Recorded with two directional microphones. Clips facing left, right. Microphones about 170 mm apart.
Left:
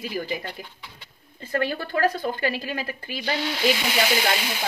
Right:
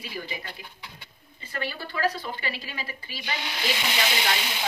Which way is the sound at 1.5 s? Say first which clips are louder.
Left 8 dB; 50° left (ahead or behind).